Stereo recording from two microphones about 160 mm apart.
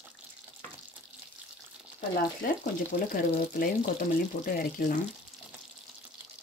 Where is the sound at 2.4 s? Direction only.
65° left (ahead or behind).